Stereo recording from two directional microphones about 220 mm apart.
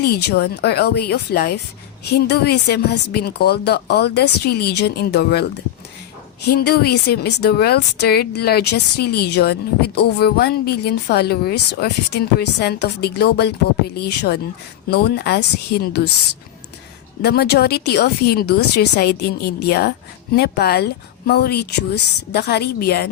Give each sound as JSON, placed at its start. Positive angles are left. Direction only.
{"t": 0.0, "sound": "speech", "side_deg": 45}
{"t": 17.2, "sound": "speech", "side_deg": 50}